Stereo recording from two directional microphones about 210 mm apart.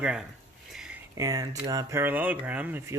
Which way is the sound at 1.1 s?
15° right (ahead or behind).